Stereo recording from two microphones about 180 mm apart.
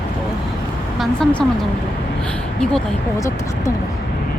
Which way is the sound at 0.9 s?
Centre (ahead or behind).